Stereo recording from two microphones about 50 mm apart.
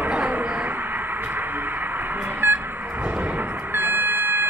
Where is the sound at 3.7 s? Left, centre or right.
Right.